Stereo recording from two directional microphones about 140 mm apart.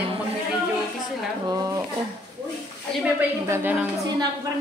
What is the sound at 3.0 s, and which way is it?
Speech, 15° right (ahead or behind).